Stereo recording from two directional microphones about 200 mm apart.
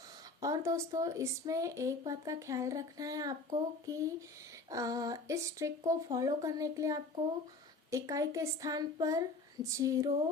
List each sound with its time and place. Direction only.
0.3 s speech: 15° right (ahead or behind)